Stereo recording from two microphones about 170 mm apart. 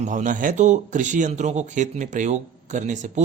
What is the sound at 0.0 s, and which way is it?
Speech, 50° right (ahead or behind).